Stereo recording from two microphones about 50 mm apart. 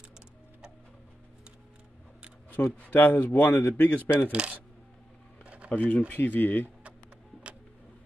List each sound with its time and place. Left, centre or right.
2.6 s speech: left
4.3 s coin: right
5.4 s a sound: right
5.7 s speech: left
6.0 s speech: left